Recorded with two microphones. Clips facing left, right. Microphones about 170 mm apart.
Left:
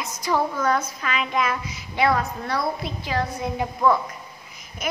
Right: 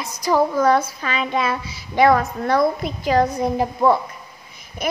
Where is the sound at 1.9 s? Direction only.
45° right (ahead or behind).